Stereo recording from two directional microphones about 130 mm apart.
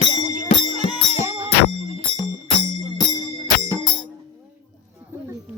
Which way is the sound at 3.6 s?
35° left (ahead or behind).